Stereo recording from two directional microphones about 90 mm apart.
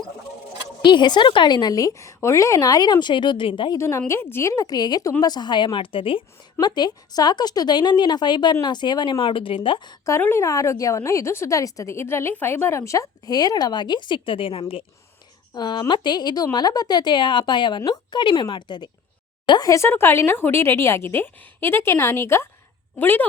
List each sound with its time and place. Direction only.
0.9 s a woman's voice: 55° left (ahead or behind)
3.8 s a woman's voice: 30° left (ahead or behind); by 6.2 s 75° left (ahead or behind)
6.6 s a woman's voice: 50° left (ahead or behind)
10.1 s a woman's voice: 25° left (ahead or behind); by 14.6 s 80° left
15.5 s a woman's voice: 50° left (ahead or behind)
19.6 s a woman's voice: 35° left (ahead or behind)